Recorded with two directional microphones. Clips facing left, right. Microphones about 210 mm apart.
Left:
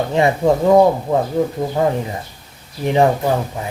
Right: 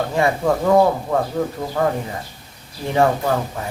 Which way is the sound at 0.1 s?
20° left (ahead or behind).